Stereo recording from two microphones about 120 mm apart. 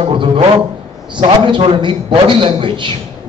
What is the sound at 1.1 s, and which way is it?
A man's voice, 40° right (ahead or behind).